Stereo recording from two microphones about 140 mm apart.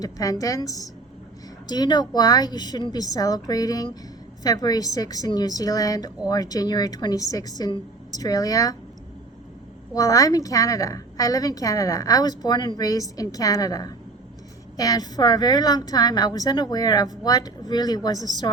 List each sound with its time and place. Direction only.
0.0 s a woman's voice: 25° left (ahead or behind)
9.9 s a woman's voice: 25° left (ahead or behind)